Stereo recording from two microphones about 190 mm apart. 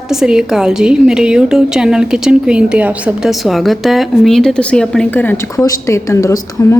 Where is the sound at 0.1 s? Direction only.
5° right (ahead or behind).